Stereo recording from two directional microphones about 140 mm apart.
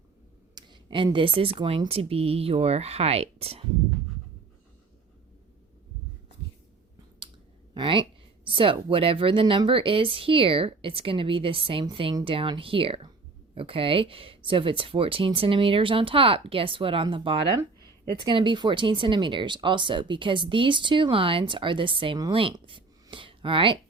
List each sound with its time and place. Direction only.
0.5 s speech: 35° right (ahead or behind)
7.7 s speech: 35° right (ahead or behind)